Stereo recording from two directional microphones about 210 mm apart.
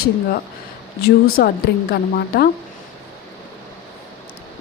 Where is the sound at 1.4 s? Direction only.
50° left (ahead or behind).